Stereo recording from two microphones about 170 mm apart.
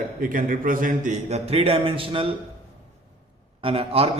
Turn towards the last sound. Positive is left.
turn(degrees=-35)  # may be behind; listen again after turning